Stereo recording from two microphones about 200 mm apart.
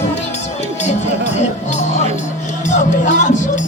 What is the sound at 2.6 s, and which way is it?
Music, 40° left (ahead or behind).